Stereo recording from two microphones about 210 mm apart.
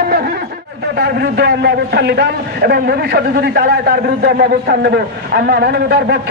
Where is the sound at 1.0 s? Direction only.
50° right (ahead or behind).